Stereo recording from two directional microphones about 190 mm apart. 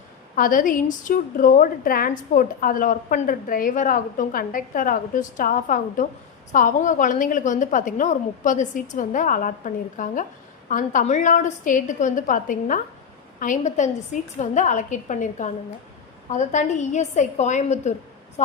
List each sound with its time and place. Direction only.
0.3 s a woman's voice: 45° left (ahead or behind)